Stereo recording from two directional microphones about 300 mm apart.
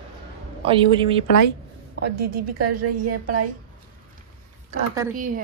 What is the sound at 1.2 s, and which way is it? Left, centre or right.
Speech, left.